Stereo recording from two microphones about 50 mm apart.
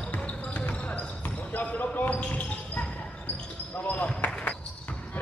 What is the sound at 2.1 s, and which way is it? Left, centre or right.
Basketball bounce, left.